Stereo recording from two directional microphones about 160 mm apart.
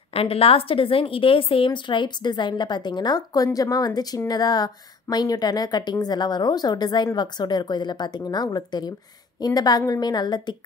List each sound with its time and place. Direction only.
0.1 s a woman's voice: 35° left (ahead or behind)